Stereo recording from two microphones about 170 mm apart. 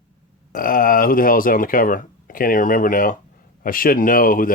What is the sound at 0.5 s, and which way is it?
Speech, 55° left (ahead or behind).